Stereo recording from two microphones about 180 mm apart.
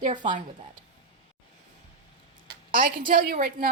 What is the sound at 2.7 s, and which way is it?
Speech, 50° right (ahead or behind).